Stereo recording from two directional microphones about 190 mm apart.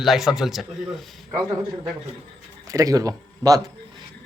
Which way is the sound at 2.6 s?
20° right (ahead or behind).